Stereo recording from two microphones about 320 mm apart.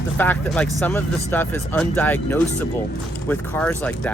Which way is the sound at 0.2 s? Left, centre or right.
Centre.